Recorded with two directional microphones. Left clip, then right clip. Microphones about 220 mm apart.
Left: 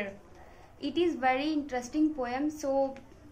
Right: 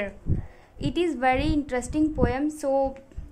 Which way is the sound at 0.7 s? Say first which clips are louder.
Right 3 dB; 50° right (ahead or behind).